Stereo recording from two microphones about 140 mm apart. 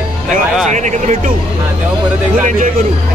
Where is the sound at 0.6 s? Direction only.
60° right (ahead or behind).